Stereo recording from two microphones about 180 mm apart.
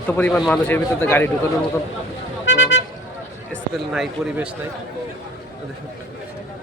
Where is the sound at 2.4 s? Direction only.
90° left.